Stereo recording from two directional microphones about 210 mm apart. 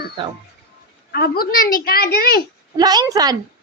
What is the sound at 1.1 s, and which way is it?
Speech, 45° left (ahead or behind).